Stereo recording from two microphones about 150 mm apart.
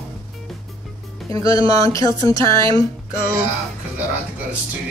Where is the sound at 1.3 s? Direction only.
25° left (ahead or behind).